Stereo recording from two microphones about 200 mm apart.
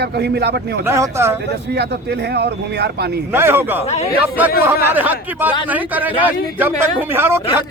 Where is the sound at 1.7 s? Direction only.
55° right (ahead or behind).